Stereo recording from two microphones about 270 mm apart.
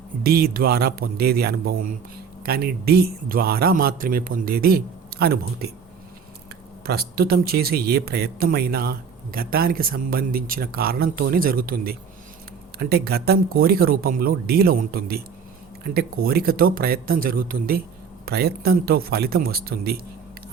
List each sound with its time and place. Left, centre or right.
0.2 s speech: right
6.8 s speech: right